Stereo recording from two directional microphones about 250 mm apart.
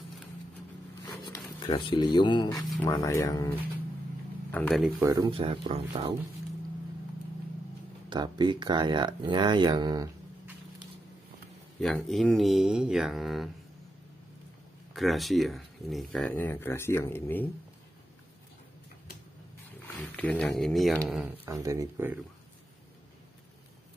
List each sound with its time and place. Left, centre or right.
1.0 s speech: centre
5.0 s speech: centre
8.1 s speech: centre
11.8 s speech: centre
15.0 s speech: centre
19.9 s speech: centre
21.5 s speech: centre